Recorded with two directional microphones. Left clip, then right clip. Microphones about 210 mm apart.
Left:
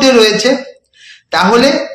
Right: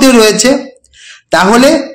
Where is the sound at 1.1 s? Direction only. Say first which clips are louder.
Right 2 dB; 55° right (ahead or behind).